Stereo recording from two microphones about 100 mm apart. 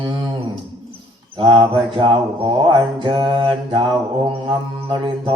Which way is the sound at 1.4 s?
60° right (ahead or behind).